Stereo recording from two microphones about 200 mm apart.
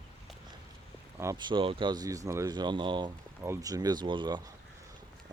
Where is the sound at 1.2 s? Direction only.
20° right (ahead or behind).